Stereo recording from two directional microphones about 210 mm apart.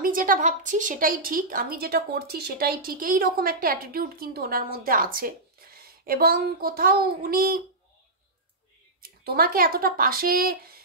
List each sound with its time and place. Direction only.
0.0 s speech: 40° right (ahead or behind)
9.0 s speech: 45° right (ahead or behind)